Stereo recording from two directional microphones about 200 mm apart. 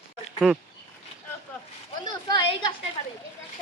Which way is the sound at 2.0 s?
20° left (ahead or behind).